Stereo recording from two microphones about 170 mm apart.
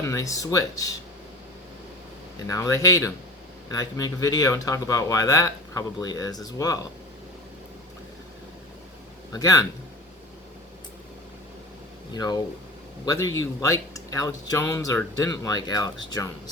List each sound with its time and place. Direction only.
0.0 s speech: 20° left (ahead or behind)
2.5 s speech: 20° left (ahead or behind)
9.3 s speech: 20° left (ahead or behind)
12.1 s speech: 25° left (ahead or behind)